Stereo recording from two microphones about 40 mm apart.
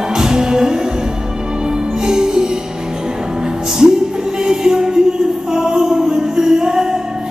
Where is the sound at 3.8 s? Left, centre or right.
Centre.